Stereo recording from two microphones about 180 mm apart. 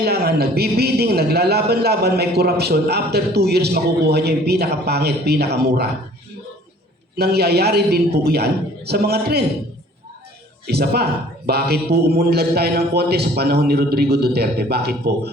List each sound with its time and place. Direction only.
0.0 s a man's voice: 60° right (ahead or behind)
7.2 s a man's voice: 60° right (ahead or behind)
10.7 s a man's voice: 60° right (ahead or behind)